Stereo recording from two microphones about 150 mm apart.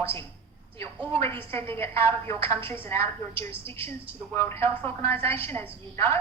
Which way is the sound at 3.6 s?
40° right (ahead or behind).